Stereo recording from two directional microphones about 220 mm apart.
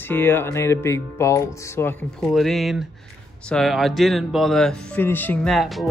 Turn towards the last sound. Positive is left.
turn(degrees=0)  # may be behind; listen again after turning